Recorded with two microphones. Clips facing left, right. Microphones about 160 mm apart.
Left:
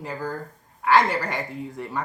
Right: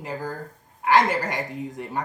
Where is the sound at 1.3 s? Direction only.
20° right (ahead or behind).